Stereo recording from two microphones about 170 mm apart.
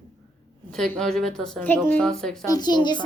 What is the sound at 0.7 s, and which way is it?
Speech, 5° left (ahead or behind).